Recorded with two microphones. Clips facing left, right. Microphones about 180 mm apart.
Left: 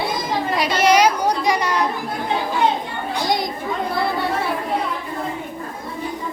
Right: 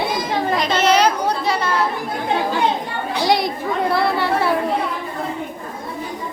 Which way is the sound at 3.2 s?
70° right (ahead or behind).